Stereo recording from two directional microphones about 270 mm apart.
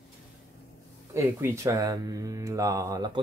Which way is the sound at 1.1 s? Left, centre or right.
Centre.